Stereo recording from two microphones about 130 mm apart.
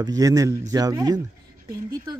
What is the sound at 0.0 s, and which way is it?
Speech, 25° right (ahead or behind).